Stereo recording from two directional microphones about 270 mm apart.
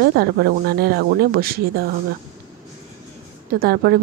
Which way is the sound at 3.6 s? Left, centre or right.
Right.